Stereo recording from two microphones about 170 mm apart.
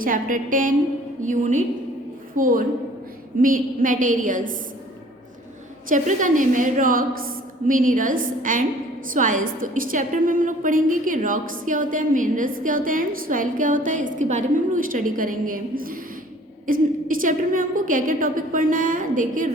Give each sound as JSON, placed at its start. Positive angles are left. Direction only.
{"t": 0.0, "sound": "a woman's voice", "side_deg": -55}
{"t": 5.9, "sound": "a woman's voice", "side_deg": -50}